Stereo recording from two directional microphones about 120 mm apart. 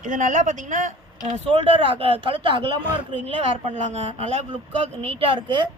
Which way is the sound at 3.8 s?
70° right (ahead or behind).